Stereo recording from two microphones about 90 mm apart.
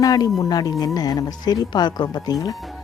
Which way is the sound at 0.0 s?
40° left (ahead or behind).